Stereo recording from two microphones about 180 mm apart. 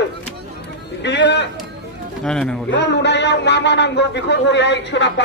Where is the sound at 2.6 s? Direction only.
75° left (ahead or behind).